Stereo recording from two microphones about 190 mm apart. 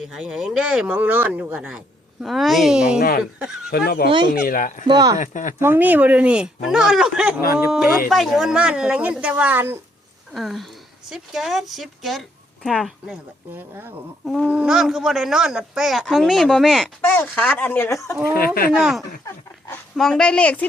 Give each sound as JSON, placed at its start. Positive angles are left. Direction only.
{"t": 0.0, "sound": "speech", "side_deg": 0}
{"t": 3.7, "sound": "speech", "side_deg": 55}
{"t": 4.9, "sound": "speech", "side_deg": -20}
{"t": 5.1, "sound": "speech", "side_deg": 40}
{"t": 5.5, "sound": "speech", "side_deg": -10}
{"t": 18.3, "sound": "speech", "side_deg": 50}
{"t": 18.7, "sound": "speech", "side_deg": 0}